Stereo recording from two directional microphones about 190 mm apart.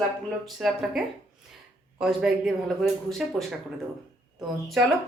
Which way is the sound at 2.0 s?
Centre (ahead or behind).